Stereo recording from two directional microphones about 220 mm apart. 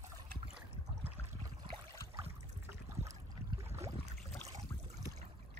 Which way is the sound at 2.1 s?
15° right (ahead or behind).